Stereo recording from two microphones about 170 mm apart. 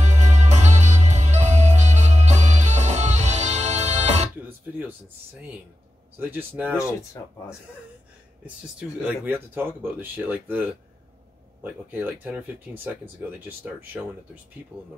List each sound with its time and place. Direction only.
0.0 s music: 45° right (ahead or behind)
4.7 s speech: 10° right (ahead or behind)
7.2 s speech: 20° left (ahead or behind)
8.7 s speech: 10° right (ahead or behind)